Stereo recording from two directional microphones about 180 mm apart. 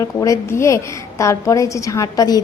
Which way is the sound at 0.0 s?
20° left (ahead or behind).